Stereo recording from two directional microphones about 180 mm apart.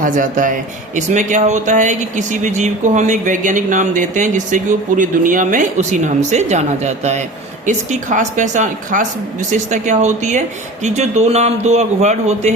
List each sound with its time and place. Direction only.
0.0 s a man's voice: 45° right (ahead or behind)